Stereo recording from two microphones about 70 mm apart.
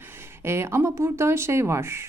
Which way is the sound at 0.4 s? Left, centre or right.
Right.